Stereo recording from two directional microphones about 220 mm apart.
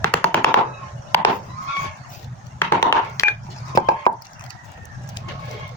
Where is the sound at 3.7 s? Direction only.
15° left (ahead or behind).